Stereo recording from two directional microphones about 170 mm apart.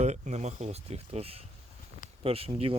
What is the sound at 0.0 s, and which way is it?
Speech, 40° right (ahead or behind).